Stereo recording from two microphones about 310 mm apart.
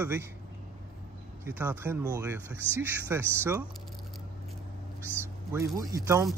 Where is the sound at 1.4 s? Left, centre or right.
Centre.